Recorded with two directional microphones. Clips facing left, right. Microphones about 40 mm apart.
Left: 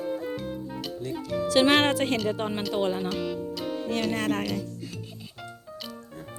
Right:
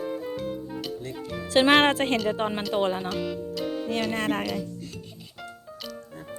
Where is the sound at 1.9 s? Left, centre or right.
Right.